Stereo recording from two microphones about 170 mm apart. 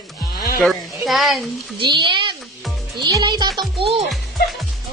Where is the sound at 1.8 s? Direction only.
25° right (ahead or behind).